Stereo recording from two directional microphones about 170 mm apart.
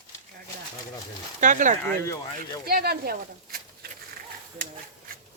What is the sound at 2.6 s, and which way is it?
Speech, 65° right (ahead or behind).